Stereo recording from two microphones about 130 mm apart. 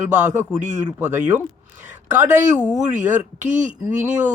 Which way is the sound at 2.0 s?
70° right (ahead or behind).